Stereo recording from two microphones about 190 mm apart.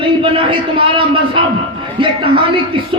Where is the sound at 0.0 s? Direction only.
30° right (ahead or behind).